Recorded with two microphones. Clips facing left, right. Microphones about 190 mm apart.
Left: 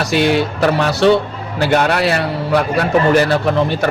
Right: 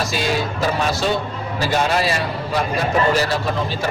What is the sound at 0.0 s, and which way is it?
A man's voice, 65° left (ahead or behind).